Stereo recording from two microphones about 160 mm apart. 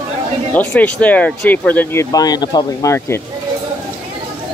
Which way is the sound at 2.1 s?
25° left (ahead or behind).